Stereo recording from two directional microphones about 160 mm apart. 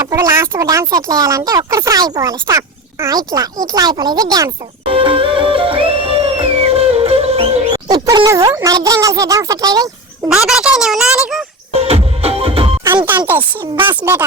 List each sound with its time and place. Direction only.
0.0 s speech: 15° right (ahead or behind)
4.9 s music: 35° right (ahead or behind)
10.3 s speech: 5° right (ahead or behind)
11.7 s music: 40° right (ahead or behind)
13.1 s speech: 10° right (ahead or behind)